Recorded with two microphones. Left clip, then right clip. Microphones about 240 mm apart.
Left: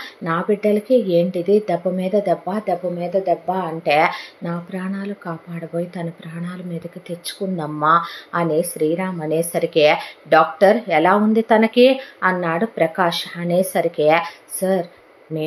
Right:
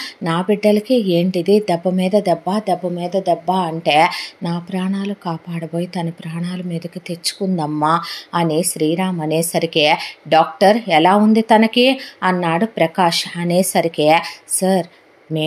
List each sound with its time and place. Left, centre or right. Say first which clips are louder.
0.0 s speech: right 2 dB; right